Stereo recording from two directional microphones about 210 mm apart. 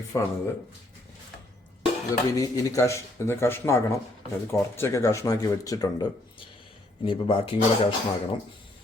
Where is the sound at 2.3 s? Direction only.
15° left (ahead or behind).